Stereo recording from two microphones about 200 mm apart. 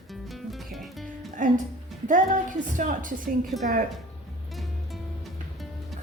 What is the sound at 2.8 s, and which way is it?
Speech, 40° right (ahead or behind).